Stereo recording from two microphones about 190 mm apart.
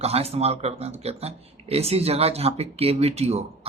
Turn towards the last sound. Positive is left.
turn(degrees=-35)  # may be behind; listen again after turning